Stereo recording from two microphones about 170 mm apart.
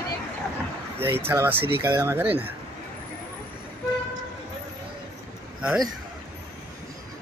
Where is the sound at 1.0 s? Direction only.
15° right (ahead or behind).